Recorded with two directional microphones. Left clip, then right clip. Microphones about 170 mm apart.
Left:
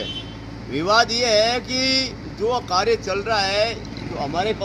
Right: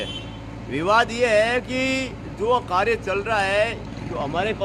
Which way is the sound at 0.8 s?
10° right (ahead or behind).